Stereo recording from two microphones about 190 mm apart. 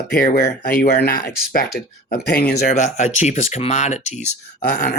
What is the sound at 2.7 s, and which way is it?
Speech, 35° left (ahead or behind).